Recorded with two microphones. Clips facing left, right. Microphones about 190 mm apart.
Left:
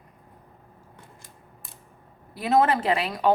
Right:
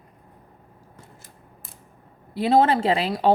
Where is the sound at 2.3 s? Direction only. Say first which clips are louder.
Right 3 dB; 30° right (ahead or behind).